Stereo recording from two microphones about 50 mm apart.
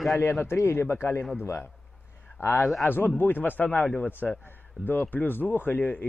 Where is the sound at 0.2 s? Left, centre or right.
Left.